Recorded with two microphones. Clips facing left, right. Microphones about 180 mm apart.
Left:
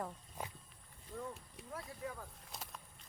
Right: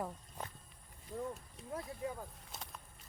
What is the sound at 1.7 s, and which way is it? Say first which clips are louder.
Speech: right 4 dB; 20° right (ahead or behind).